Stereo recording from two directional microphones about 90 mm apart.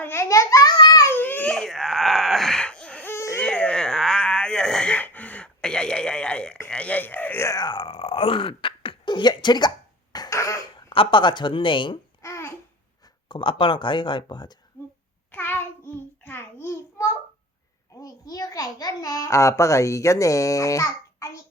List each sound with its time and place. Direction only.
0.0 s a child's voice: 30° left (ahead or behind)
1.0 s baby cry: 20° left (ahead or behind)
1.5 s baby cry: 5° left (ahead or behind)
3.2 s baby cry: 30° left (ahead or behind)
3.4 s a sound: 10° left (ahead or behind)
6.7 s speech: 15° left (ahead or behind)
7.6 s a sound: 65° left (ahead or behind)
10.2 s cough: 35° left (ahead or behind)
10.8 s a woman's voice: 75° left (ahead or behind)
12.2 s babbling: 30° left (ahead or behind)
13.2 s speech: 65° left (ahead or behind)
15.3 s child singing: 25° left (ahead or behind)
16.2 s a sound: 25° left (ahead or behind)
18.0 s a child's voice: 40° left (ahead or behind)